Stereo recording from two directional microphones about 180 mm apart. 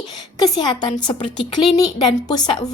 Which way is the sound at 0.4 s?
25° left (ahead or behind).